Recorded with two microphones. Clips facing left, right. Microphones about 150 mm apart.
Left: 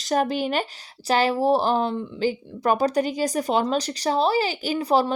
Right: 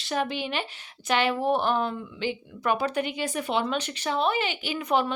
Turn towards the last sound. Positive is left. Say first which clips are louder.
# left 5 dB
turn(degrees=35)  # may be behind; listen again after turning